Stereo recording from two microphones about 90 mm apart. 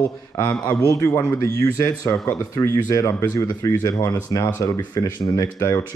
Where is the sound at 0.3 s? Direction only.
35° left (ahead or behind).